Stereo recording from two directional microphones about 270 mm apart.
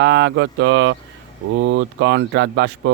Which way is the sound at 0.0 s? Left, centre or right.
Right.